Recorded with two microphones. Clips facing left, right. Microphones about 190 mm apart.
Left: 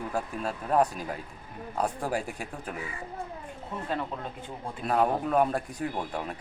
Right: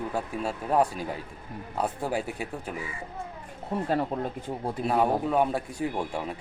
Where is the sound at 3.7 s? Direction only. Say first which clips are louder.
Right 8 dB; 40° right (ahead or behind).